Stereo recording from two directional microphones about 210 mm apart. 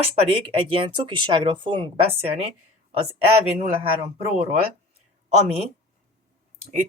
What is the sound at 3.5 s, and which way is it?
Speech, 30° right (ahead or behind).